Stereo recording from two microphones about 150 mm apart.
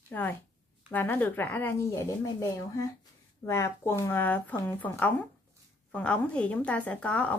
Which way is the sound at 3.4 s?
15° left (ahead or behind).